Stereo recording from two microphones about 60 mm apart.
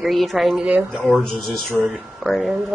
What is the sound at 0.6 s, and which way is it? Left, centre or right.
Speech, centre.